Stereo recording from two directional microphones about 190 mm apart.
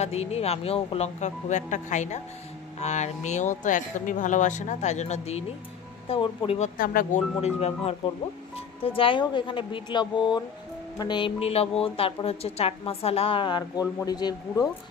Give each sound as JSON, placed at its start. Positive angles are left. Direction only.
{"t": 0.0, "sound": "a woman's voice", "side_deg": 35}
{"t": 6.8, "sound": "speech", "side_deg": 50}
{"t": 8.0, "sound": "a woman's voice", "side_deg": 30}